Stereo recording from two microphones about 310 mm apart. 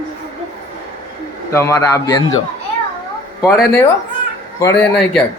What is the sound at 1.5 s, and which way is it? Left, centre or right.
Speech, centre.